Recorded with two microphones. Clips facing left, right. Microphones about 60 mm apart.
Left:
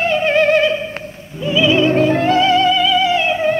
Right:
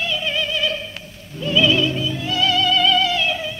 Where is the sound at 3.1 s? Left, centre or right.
Left.